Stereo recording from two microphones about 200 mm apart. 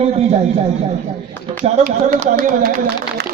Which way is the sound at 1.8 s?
45° right (ahead or behind).